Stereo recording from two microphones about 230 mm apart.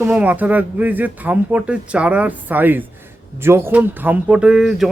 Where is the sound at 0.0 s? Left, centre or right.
Centre.